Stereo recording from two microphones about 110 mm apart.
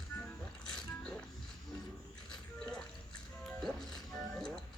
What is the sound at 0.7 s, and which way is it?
Music, 5° left (ahead or behind).